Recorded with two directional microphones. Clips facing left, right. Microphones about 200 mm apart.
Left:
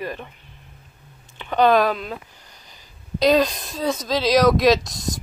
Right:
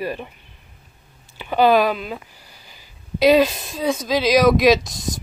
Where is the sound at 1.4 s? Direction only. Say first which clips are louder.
Right 1 dB; 5° right (ahead or behind).